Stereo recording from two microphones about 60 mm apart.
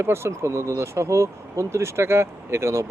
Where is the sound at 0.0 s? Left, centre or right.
Right.